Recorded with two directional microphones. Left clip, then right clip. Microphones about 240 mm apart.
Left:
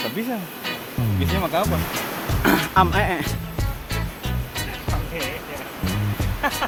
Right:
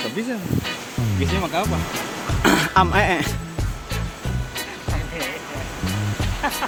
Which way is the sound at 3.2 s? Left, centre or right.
Centre.